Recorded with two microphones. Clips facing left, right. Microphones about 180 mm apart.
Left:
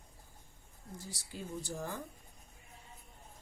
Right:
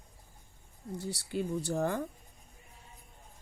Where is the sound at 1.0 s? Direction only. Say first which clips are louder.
Right 12 dB; 65° right (ahead or behind).